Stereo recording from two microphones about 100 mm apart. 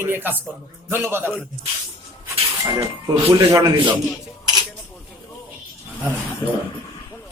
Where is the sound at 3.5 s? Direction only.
40° right (ahead or behind).